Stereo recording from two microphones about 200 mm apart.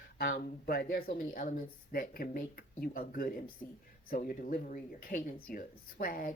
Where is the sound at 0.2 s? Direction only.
50° left (ahead or behind).